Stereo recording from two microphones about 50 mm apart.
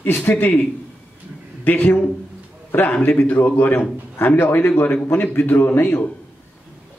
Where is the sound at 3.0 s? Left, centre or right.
Left.